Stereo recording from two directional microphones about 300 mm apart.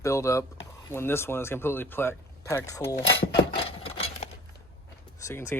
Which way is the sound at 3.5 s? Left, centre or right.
Centre.